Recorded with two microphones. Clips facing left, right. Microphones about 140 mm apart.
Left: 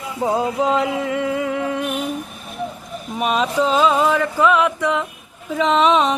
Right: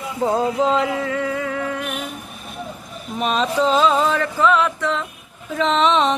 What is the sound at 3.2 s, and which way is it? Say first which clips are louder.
Music: left 1 dB; 10° left (ahead or behind).